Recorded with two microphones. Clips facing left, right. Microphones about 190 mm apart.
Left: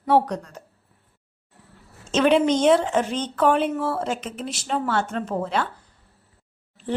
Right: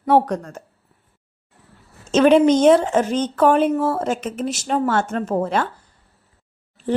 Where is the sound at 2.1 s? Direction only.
45° right (ahead or behind).